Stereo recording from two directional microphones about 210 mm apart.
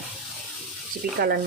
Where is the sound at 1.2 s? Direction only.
45° right (ahead or behind).